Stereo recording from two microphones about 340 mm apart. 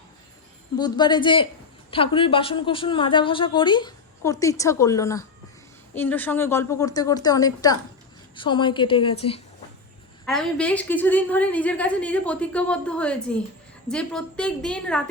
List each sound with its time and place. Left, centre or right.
0.8 s a woman's voice: centre
10.2 s a woman's voice: centre